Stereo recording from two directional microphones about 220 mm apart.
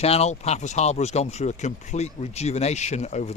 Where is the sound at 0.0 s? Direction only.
30° left (ahead or behind).